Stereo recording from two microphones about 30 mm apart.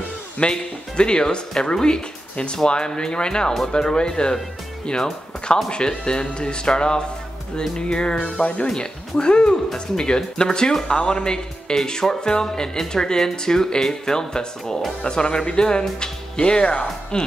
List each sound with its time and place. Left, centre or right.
0.4 s speech: left
5.7 s speech: left
10.9 s speech: left
11.2 s speech: left